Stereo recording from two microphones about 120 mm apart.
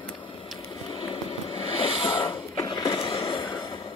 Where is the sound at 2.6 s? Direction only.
30° left (ahead or behind).